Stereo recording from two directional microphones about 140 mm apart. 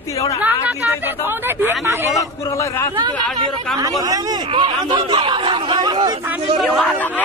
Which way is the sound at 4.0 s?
30° right (ahead or behind).